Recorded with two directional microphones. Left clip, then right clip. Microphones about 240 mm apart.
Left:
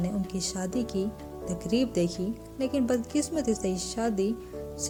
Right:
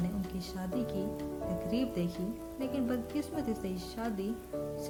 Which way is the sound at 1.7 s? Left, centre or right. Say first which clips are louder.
Left 7 dB; left.